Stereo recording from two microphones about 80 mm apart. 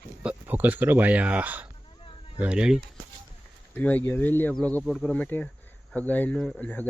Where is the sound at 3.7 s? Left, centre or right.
Left.